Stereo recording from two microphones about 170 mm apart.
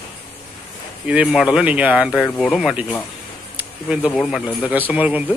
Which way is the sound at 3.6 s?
10° right (ahead or behind).